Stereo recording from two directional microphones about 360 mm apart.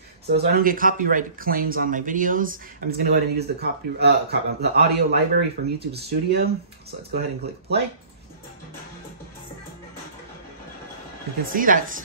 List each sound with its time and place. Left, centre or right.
0.3 s speech: right
11.4 s speech: right